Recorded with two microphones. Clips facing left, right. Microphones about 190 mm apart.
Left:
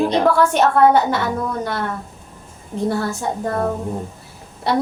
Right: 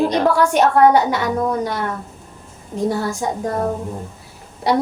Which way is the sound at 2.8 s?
10° right (ahead or behind).